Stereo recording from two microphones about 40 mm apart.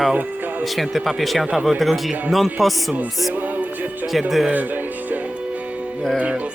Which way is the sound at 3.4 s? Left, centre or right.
Right.